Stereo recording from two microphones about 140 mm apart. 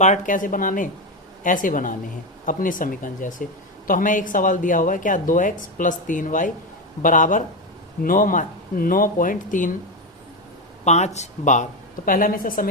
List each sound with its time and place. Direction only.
0.0 s speech: 65° left (ahead or behind)
10.8 s speech: 55° left (ahead or behind)
12.0 s speech: 85° left